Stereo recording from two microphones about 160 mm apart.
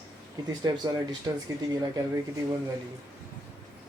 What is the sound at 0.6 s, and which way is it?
Speech, 25° right (ahead or behind).